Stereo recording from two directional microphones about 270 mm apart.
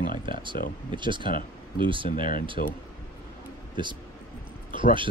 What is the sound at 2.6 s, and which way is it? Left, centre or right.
Speech, left.